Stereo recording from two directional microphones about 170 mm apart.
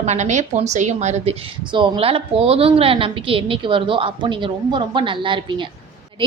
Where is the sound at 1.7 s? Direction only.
30° right (ahead or behind).